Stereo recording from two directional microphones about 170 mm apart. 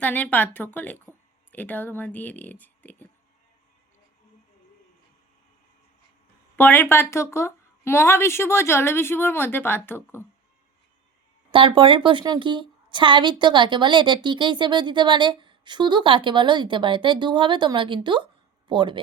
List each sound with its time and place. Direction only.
0.0 s a woman's voice: 10° left (ahead or behind)
6.6 s a woman's voice: 10° left (ahead or behind)
11.5 s a woman's voice: 30° right (ahead or behind)